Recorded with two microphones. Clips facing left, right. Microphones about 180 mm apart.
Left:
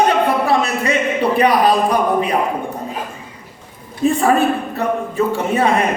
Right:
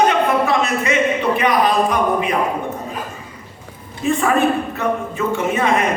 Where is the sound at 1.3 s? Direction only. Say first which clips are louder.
Left 6 dB; 35° left (ahead or behind).